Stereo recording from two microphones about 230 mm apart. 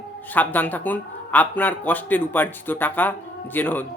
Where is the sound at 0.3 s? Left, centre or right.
Centre.